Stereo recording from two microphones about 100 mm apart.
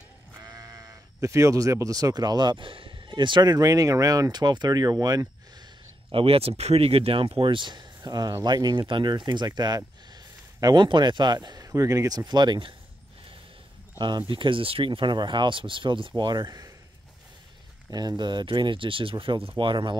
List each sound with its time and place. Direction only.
0.4 s speech: 35° right (ahead or behind)
6.1 s speech: 75° right (ahead or behind); by 12.7 s 50° right (ahead or behind)
13.9 s speech: 50° right (ahead or behind)
17.9 s speech: 45° right (ahead or behind)